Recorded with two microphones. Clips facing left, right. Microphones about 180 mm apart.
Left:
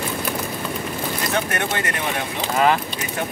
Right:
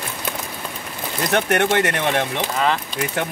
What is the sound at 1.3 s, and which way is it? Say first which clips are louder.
Speech: right 8 dB; 70° right (ahead or behind).